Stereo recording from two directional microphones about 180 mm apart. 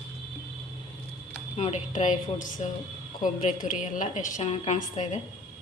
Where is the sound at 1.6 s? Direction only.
40° left (ahead or behind).